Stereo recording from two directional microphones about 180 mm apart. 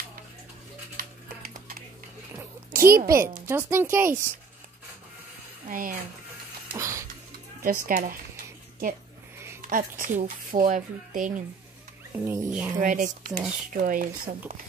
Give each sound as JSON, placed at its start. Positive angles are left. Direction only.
{"t": 0.9, "sound": "a sound", "side_deg": -55}
{"t": 2.7, "sound": "a woman's voice", "side_deg": -50}
{"t": 3.1, "sound": "speech", "side_deg": -15}
{"t": 5.7, "sound": "speech", "side_deg": -50}
{"t": 6.7, "sound": "music", "side_deg": -15}
{"t": 7.6, "sound": "speech", "side_deg": -50}
{"t": 9.7, "sound": "speech", "side_deg": -50}
{"t": 12.2, "sound": "speech", "side_deg": -15}
{"t": 12.7, "sound": "speech", "side_deg": -45}